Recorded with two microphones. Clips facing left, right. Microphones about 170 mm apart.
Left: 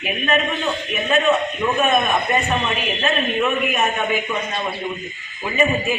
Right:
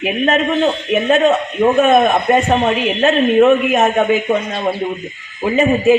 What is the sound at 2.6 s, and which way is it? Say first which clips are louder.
A man's voice: right 8 dB; 70° right (ahead or behind).